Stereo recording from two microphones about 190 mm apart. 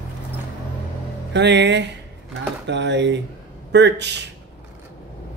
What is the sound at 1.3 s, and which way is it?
Speech, 65° right (ahead or behind).